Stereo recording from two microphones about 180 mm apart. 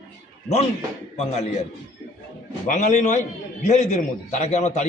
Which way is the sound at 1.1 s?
35° left (ahead or behind).